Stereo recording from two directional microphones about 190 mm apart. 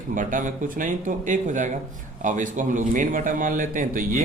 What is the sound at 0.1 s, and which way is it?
A man's voice, 45° right (ahead or behind).